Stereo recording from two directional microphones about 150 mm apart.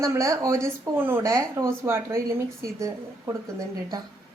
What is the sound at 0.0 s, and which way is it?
Speech, 20° right (ahead or behind).